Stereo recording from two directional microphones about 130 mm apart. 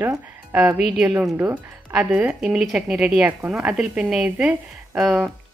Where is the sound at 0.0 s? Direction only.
15° right (ahead or behind).